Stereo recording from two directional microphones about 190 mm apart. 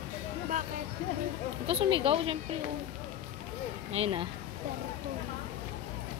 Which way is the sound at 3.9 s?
30° right (ahead or behind).